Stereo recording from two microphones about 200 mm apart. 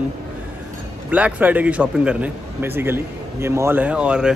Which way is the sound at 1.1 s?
10° right (ahead or behind).